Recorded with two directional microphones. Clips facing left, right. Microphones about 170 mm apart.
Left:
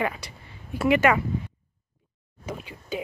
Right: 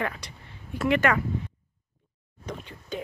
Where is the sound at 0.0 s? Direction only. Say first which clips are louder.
Left 3 dB; 10° left (ahead or behind).